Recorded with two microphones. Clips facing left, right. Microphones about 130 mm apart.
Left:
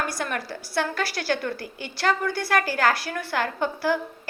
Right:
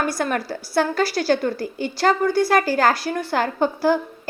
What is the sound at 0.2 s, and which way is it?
A woman's voice, 45° right (ahead or behind).